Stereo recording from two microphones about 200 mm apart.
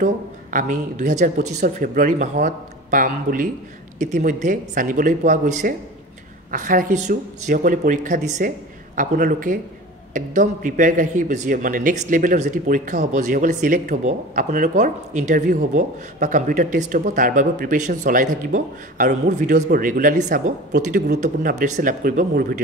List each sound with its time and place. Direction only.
0.0 s speech: 40° right (ahead or behind)